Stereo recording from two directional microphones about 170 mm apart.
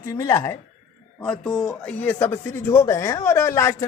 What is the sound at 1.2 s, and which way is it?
Speech, 5° left (ahead or behind).